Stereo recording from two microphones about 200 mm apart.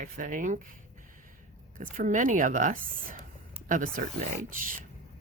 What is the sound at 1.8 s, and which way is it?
A woman's voice, 40° right (ahead or behind).